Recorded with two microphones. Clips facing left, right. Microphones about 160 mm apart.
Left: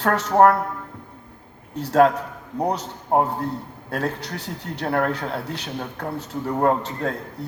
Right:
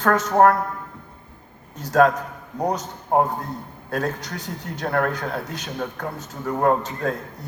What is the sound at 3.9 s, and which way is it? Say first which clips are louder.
A man's voice: even; 30° left (ahead or behind).